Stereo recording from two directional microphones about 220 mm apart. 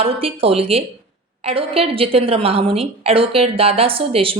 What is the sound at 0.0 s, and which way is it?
A woman's voice, 25° right (ahead or behind).